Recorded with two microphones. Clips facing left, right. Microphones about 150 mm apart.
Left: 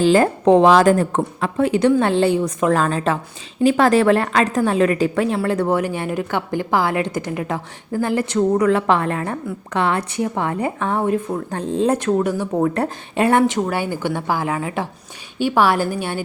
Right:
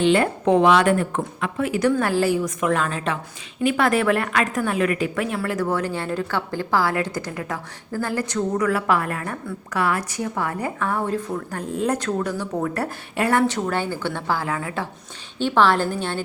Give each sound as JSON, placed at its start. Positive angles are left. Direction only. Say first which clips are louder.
{"t": 0.0, "sound": "a woman's voice", "louder": "left 4 dB", "side_deg": 35}
{"t": 5.7, "sound": "a woman's voice", "louder": "left 4 dB", "side_deg": 15}